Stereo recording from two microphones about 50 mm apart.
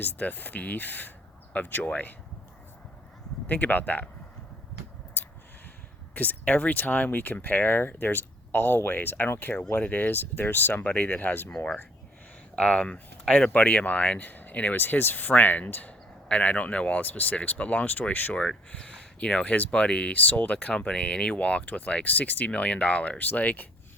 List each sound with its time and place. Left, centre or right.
0.0 s speech: left
3.4 s speech: left
6.1 s speech: left
11.5 s speech: centre; by 15.9 s left
15.9 s speech: left
18.3 s speech: left